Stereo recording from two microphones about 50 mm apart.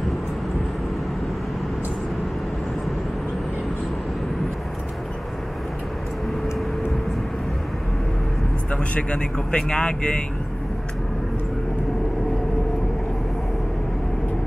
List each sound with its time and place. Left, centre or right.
8.7 s speech: left